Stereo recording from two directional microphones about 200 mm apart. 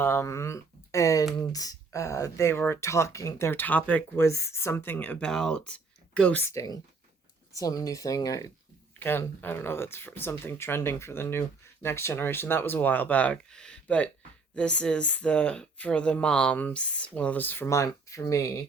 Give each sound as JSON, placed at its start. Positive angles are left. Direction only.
{"t": 0.0, "sound": "speech", "side_deg": 15}